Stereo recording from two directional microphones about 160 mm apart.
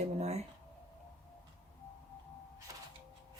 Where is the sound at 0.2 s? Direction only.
40° right (ahead or behind).